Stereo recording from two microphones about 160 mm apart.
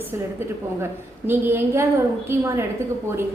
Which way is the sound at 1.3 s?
15° right (ahead or behind).